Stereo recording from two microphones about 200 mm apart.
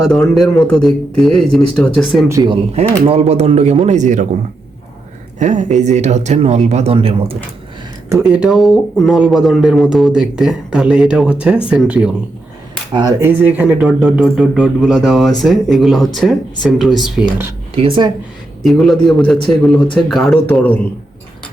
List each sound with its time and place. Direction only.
0.1 s speech: centre (ahead or behind)
2.3 s speech: 20° right (ahead or behind)
3.1 s speech: 30° right (ahead or behind)
5.4 s speech: 35° right (ahead or behind)
8.3 s speech: 5° right (ahead or behind)
12.9 s speech: 20° right (ahead or behind)
17.7 s speech: 25° right (ahead or behind)
18.6 s speech: centre (ahead or behind)